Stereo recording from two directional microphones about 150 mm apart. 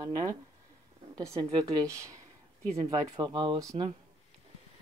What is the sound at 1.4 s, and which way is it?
Speech, 30° right (ahead or behind).